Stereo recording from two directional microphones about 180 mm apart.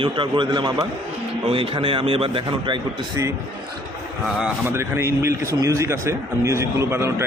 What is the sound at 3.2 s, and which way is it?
Speech, 15° right (ahead or behind).